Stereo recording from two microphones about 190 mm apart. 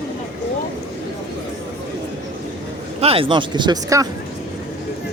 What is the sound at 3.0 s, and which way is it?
Speech, 30° right (ahead or behind).